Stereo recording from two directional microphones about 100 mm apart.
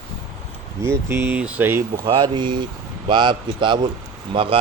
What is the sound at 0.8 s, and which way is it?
Speech, 25° right (ahead or behind).